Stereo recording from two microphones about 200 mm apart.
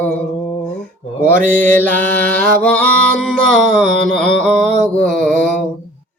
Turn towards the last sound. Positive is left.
turn(degrees=5)  # may be behind; listen again after turning